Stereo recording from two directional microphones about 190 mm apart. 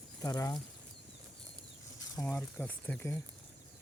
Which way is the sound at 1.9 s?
15° left (ahead or behind).